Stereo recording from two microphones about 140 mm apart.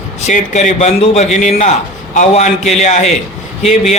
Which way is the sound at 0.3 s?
55° left (ahead or behind).